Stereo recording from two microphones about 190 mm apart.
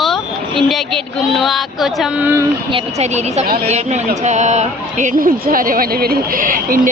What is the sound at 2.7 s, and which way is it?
A woman's voice, 35° right (ahead or behind).